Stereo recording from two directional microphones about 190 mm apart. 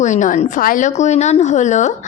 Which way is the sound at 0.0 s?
40° left (ahead or behind).